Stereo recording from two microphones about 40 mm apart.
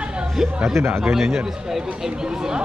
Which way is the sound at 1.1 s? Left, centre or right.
Centre.